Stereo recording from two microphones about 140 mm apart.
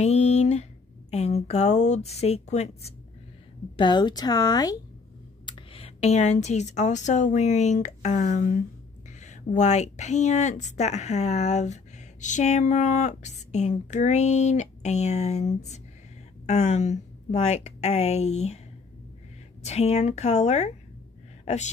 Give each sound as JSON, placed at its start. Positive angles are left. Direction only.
{"t": 0.0, "sound": "a sound", "side_deg": 50}
{"t": 1.1, "sound": "a woman's voice", "side_deg": 50}
{"t": 3.7, "sound": "speech", "side_deg": 30}
{"t": 5.4, "sound": "a woman's voice", "side_deg": 40}
{"t": 19.6, "sound": "a woman's voice", "side_deg": 50}